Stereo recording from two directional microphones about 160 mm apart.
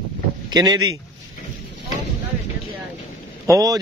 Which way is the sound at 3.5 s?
20° right (ahead or behind).